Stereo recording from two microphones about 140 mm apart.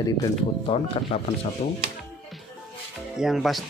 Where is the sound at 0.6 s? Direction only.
40° left (ahead or behind).